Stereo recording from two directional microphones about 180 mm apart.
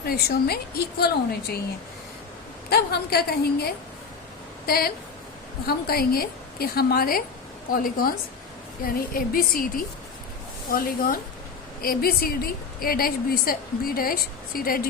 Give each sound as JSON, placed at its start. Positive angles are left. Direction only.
{"t": 0.0, "sound": "a woman's voice", "side_deg": 60}
{"t": 2.6, "sound": "a woman's voice", "side_deg": 60}